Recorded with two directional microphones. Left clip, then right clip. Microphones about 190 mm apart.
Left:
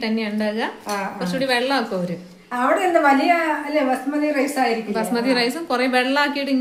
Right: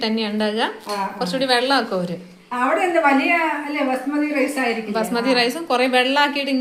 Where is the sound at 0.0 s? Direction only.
5° right (ahead or behind).